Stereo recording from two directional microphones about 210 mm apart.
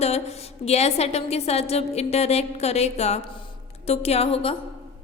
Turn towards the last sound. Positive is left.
turn(degrees=30)  # may be behind; listen again after turning